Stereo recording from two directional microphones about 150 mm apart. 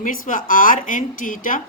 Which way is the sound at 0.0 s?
60° left (ahead or behind).